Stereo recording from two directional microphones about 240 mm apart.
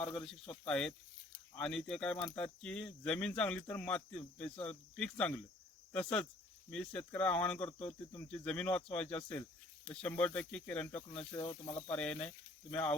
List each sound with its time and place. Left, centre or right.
0.1 s speech: centre
11.3 s speech: centre
11.9 s speech: centre